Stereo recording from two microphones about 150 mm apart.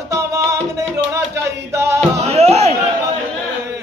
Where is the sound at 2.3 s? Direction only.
45° right (ahead or behind).